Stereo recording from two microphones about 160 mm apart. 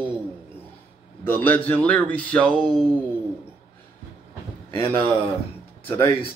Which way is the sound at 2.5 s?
25° right (ahead or behind).